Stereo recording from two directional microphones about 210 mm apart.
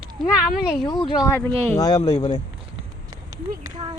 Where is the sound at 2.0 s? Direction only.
30° left (ahead or behind).